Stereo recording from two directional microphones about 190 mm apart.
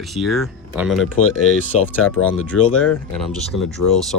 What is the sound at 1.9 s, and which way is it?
Speech, 10° left (ahead or behind).